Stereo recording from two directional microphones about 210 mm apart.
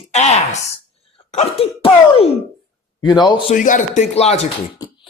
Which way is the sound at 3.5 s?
40° left (ahead or behind).